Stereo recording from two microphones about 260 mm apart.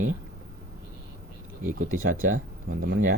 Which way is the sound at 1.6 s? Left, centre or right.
Right.